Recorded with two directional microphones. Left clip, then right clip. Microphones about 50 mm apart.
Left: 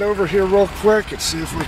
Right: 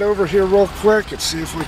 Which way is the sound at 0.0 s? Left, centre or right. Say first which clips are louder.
Right 1 dB; centre.